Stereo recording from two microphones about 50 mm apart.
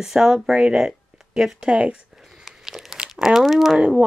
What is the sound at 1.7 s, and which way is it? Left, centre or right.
Speech, right.